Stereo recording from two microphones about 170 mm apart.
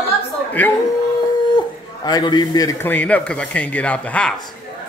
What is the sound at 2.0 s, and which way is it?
A man's voice, 25° left (ahead or behind).